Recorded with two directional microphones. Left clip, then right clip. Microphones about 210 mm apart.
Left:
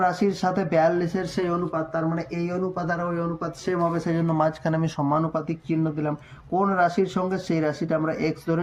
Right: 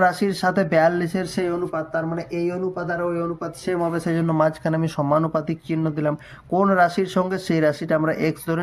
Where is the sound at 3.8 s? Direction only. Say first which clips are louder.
Right 1 dB; 30° right (ahead or behind).